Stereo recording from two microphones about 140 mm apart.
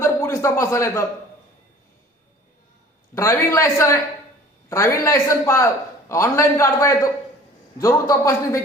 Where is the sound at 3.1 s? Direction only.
20° left (ahead or behind).